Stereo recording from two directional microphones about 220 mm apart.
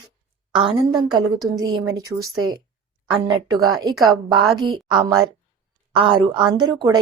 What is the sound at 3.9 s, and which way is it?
Speech, centre (ahead or behind).